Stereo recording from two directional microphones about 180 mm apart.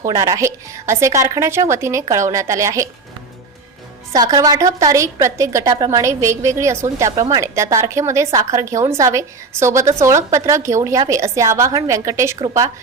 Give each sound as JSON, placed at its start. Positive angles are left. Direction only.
{"t": 0.1, "sound": "a woman's voice", "side_deg": -20}
{"t": 4.1, "sound": "a woman's voice", "side_deg": -20}